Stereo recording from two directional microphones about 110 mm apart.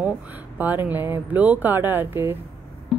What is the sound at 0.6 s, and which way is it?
Speech, 15° right (ahead or behind).